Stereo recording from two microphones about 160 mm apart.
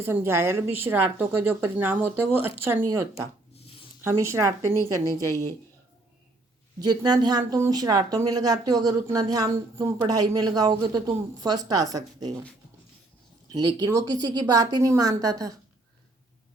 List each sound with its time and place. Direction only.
0.0 s a woman's voice: 15° right (ahead or behind)
6.7 s speech: 25° right (ahead or behind)
13.5 s speech: 25° right (ahead or behind)